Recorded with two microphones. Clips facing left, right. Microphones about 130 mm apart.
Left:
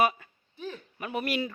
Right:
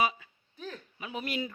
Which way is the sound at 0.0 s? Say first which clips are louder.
Left 4 dB; 55° left (ahead or behind).